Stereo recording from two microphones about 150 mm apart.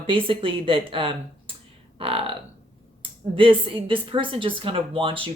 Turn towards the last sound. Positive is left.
turn(degrees=-35)  # may be behind; listen again after turning